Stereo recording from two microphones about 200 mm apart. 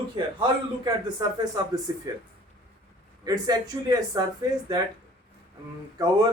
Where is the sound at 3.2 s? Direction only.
20° right (ahead or behind).